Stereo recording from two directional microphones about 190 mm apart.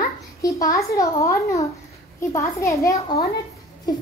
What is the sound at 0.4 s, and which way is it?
A child's voice, 20° left (ahead or behind).